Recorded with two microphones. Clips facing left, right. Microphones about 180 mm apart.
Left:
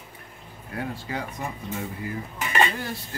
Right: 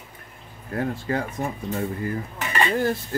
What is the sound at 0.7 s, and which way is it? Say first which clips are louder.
Speech: right 6 dB; 45° right (ahead or behind).